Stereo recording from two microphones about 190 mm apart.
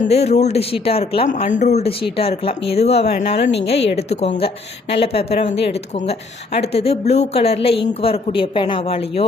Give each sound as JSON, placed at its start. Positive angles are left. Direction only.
{"t": 0.0, "sound": "speech", "side_deg": 35}
{"t": 3.5, "sound": "a woman's voice", "side_deg": 65}
{"t": 3.9, "sound": "speech", "side_deg": 35}